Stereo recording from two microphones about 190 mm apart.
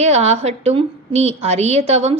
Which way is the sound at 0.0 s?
35° right (ahead or behind).